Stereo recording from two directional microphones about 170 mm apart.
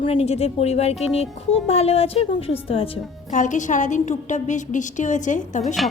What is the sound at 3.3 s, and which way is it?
A woman's voice, 45° left (ahead or behind).